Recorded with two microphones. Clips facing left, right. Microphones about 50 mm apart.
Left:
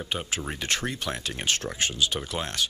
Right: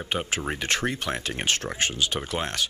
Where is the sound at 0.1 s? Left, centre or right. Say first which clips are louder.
Right 5 dB; right.